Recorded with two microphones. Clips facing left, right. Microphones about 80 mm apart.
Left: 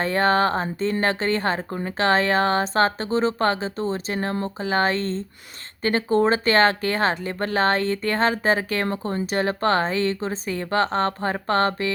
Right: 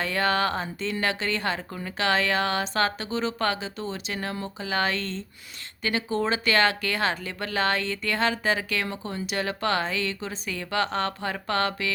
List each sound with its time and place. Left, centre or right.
0.0 s a woman's voice: left